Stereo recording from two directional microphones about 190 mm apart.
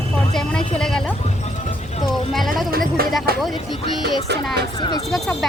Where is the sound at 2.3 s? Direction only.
Centre (ahead or behind).